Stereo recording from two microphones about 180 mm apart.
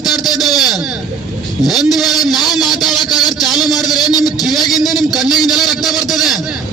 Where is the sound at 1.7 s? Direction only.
Centre (ahead or behind).